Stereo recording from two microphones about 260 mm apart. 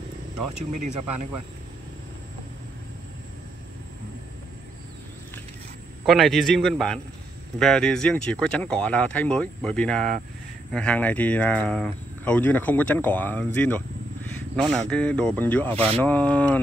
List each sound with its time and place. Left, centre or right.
0.4 s speech: right
6.0 s speech: centre